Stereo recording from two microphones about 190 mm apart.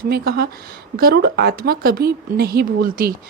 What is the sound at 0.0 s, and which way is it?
A woman's voice, 55° right (ahead or behind).